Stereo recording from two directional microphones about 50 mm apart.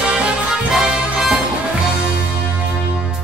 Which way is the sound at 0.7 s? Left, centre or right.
Centre.